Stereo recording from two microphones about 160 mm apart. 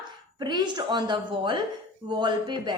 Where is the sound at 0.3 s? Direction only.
25° right (ahead or behind).